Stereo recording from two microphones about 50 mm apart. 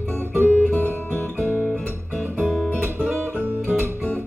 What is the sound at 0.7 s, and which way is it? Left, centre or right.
Guitar, left.